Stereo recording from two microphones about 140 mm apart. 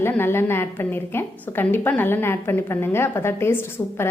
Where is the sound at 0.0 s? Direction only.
15° left (ahead or behind).